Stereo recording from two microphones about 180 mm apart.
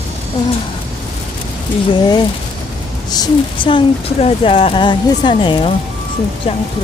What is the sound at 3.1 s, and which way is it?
Speech, 25° left (ahead or behind).